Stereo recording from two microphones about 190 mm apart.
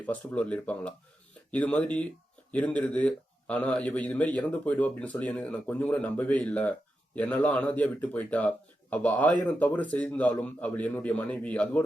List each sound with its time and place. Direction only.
0.0 s speech: 10° left (ahead or behind)